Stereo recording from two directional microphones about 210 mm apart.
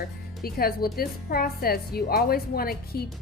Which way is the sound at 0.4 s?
45° left (ahead or behind).